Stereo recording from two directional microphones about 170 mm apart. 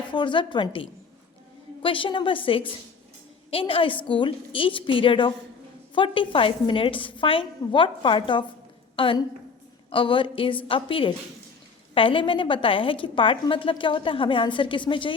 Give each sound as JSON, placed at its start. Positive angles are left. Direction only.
{"t": 0.1, "sound": "a woman's voice", "side_deg": 30}